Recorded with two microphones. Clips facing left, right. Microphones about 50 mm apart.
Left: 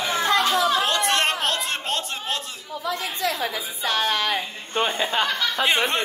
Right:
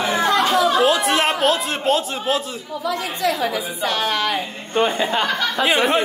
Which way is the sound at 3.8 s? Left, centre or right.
Right.